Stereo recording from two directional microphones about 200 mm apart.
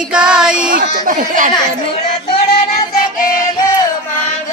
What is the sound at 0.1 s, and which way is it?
Child singing, 5° right (ahead or behind).